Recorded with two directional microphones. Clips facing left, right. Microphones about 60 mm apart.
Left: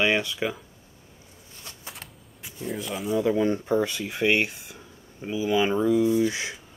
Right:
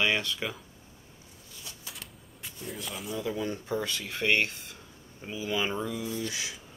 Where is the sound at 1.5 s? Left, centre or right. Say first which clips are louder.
Left 3 dB; left.